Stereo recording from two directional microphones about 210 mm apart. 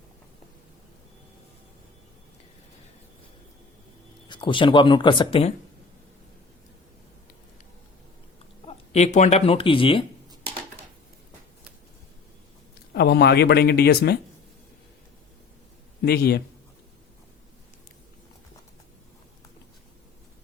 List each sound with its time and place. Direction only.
4.3 s speech: 20° left (ahead or behind)
8.6 s speech: 30° left (ahead or behind)
12.9 s speech: 50° left (ahead or behind)
16.0 s speech: 50° left (ahead or behind)